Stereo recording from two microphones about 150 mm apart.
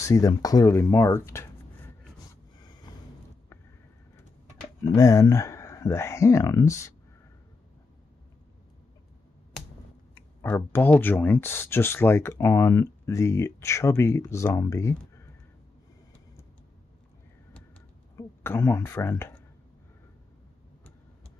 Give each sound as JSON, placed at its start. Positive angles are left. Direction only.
{"t": 0.0, "sound": "speech", "side_deg": 20}
{"t": 4.9, "sound": "speech", "side_deg": 20}
{"t": 10.1, "sound": "speech", "side_deg": 10}
{"t": 18.1, "sound": "a woman's voice", "side_deg": 15}